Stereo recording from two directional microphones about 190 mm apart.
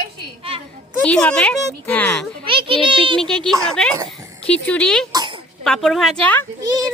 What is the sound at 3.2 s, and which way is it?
A woman's voice, 5° left (ahead or behind).